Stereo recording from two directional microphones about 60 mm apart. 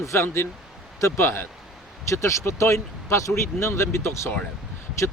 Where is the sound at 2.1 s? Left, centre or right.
Left.